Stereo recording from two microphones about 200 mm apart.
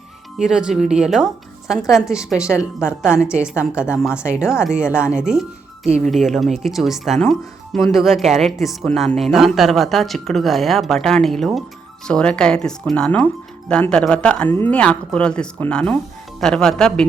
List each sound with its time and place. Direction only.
0.3 s speech: 5° right (ahead or behind)